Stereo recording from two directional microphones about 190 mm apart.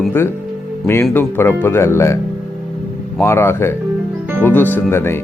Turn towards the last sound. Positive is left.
turn(degrees=10)  # may be behind; listen again after turning